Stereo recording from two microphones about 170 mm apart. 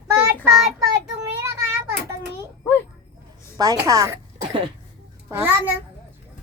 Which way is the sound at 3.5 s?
20° right (ahead or behind).